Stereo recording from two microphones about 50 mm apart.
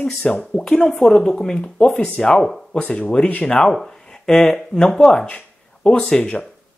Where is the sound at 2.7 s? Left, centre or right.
Left.